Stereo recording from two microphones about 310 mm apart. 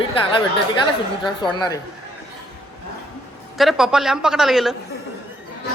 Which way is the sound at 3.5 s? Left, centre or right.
Centre.